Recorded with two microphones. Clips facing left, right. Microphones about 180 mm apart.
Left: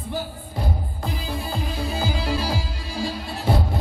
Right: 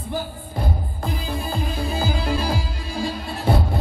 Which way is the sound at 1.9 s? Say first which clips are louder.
Right 1 dB; 50° right (ahead or behind).